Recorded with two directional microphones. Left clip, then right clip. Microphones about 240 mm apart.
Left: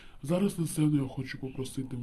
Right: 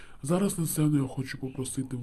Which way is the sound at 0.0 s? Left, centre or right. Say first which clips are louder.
Right 2 dB; centre.